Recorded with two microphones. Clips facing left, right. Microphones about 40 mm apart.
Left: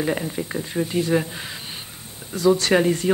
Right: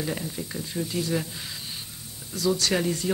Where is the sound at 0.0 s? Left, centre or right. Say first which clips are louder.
Left 7 dB; left.